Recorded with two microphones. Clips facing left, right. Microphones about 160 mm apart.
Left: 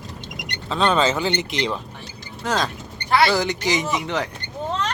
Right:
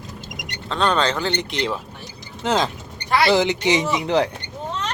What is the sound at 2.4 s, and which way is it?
Speech, 20° right (ahead or behind).